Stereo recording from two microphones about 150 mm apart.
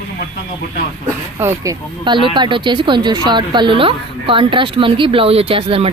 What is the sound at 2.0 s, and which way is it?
Speech, 30° right (ahead or behind).